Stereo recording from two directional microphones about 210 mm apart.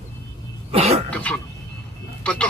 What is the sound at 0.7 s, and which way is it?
Speech, 30° right (ahead or behind).